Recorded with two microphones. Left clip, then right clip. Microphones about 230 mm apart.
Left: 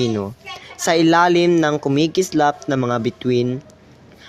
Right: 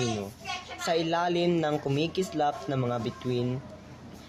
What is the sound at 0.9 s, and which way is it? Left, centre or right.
Speech, left.